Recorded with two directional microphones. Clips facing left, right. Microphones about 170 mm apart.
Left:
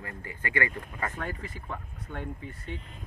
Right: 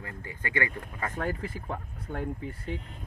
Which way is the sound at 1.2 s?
40° right (ahead or behind).